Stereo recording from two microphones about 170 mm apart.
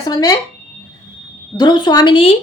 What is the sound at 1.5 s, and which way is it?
Speech, 25° left (ahead or behind).